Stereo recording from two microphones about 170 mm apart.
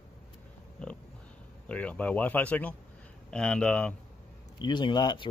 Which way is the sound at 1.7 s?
10° left (ahead or behind).